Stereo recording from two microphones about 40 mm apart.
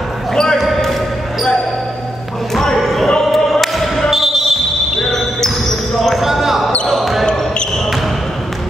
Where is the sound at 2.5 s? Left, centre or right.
Centre.